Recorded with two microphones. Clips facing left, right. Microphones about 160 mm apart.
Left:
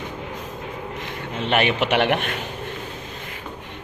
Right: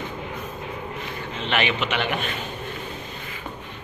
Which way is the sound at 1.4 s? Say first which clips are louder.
Left 4 dB; 50° left (ahead or behind).